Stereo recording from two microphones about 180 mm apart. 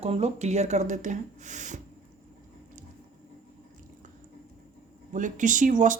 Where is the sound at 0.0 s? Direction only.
35° right (ahead or behind).